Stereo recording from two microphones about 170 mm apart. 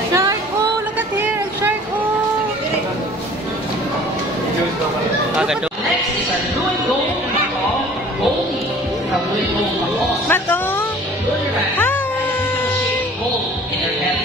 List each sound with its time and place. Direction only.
0.1 s music: 20° right (ahead or behind)
0.9 s a sound: 10° right (ahead or behind)
9.9 s music: 10° left (ahead or behind)